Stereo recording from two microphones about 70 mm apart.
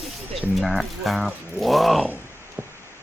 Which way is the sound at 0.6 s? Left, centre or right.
Centre.